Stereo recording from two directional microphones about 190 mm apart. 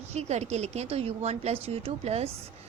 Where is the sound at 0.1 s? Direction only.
35° right (ahead or behind).